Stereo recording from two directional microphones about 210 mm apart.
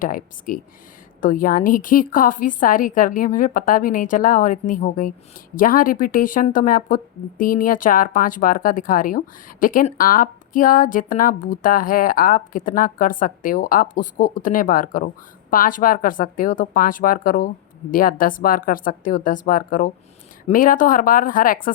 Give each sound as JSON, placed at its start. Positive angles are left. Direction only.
{"t": 0.0, "sound": "speech", "side_deg": 40}